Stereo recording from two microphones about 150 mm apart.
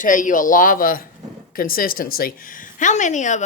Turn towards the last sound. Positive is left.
turn(degrees=55)  # may be behind; listen again after turning